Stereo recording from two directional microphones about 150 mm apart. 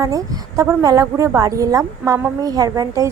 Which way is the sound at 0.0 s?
20° right (ahead or behind).